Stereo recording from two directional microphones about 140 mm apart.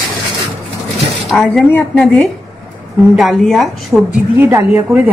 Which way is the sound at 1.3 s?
5° left (ahead or behind).